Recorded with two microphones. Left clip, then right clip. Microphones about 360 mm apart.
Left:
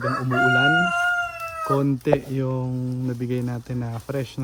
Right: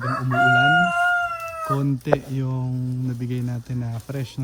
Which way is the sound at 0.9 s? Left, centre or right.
Centre.